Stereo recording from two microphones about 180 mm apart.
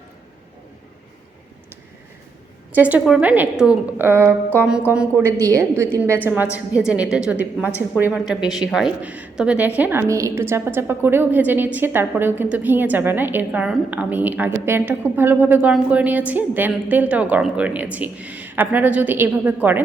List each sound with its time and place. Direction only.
2.7 s a woman's voice: 10° right (ahead or behind)